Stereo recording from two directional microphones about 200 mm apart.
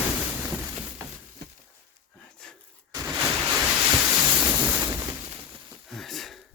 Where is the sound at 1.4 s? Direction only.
55° right (ahead or behind).